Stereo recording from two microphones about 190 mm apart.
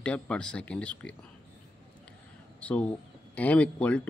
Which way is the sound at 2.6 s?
5° left (ahead or behind).